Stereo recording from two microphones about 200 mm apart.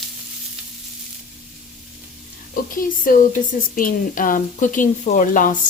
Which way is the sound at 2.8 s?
45° left (ahead or behind).